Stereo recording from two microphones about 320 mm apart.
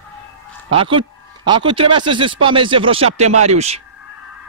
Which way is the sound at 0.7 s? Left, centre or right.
Centre.